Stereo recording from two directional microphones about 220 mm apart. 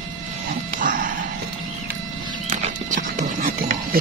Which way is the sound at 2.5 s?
35° right (ahead or behind).